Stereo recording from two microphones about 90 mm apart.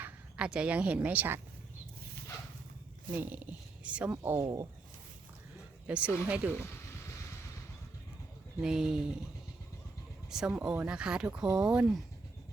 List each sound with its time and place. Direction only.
0.0 s a woman's voice: 10° right (ahead or behind)
3.1 s speech: 20° right (ahead or behind)
4.1 s speech: 30° right (ahead or behind)
5.9 s speech: 15° right (ahead or behind)
8.6 s speech: 5° right (ahead or behind)
10.2 s speech: 5° right (ahead or behind)